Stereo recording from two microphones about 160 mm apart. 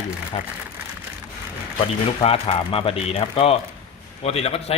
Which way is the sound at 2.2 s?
35° left (ahead or behind).